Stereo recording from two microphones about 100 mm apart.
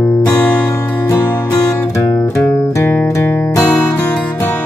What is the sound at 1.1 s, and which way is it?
Music, 40° left (ahead or behind).